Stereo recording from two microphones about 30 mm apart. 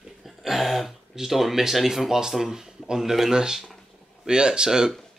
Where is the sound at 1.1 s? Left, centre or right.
Centre.